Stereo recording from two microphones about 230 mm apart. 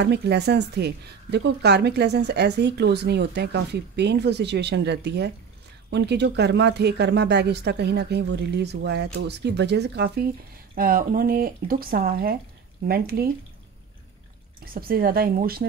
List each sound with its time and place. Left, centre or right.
0.0 s speech: right
14.6 s speech: right